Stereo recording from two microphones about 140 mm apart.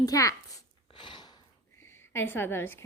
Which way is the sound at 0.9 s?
35° left (ahead or behind).